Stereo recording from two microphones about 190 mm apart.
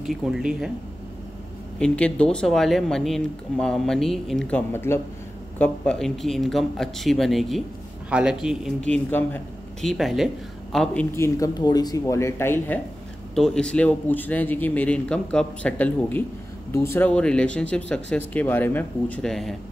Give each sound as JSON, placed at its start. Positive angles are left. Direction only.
{"t": 0.0, "sound": "speech", "side_deg": 0}
{"t": 1.8, "sound": "speech", "side_deg": 5}
{"t": 11.1, "sound": "a man's voice", "side_deg": 15}